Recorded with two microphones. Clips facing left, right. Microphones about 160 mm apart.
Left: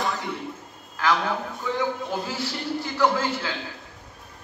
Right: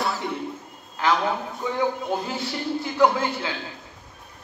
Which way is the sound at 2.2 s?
20° right (ahead or behind).